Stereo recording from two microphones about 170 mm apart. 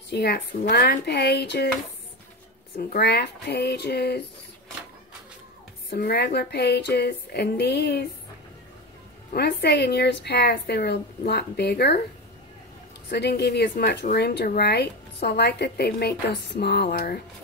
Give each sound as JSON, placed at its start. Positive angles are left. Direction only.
{"t": 0.1, "sound": "speech", "side_deg": 70}
{"t": 2.8, "sound": "speech", "side_deg": 65}
{"t": 5.9, "sound": "speech", "side_deg": 70}
{"t": 9.3, "sound": "speech", "side_deg": 70}
{"t": 13.1, "sound": "speech", "side_deg": 75}
{"t": 16.9, "sound": "music", "side_deg": 60}